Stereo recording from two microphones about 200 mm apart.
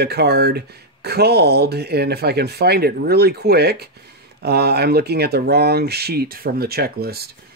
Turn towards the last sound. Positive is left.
turn(degrees=-50)  # may be behind; listen again after turning